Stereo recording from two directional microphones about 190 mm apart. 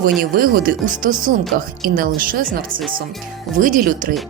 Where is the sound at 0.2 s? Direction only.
50° right (ahead or behind).